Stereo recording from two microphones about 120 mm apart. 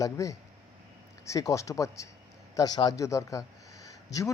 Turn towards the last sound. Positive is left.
turn(degrees=30)  # may be behind; listen again after turning